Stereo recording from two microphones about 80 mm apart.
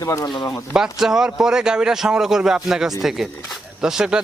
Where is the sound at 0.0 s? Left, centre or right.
Left.